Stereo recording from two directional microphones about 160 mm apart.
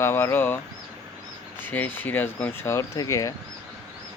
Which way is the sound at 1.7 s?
10° left (ahead or behind).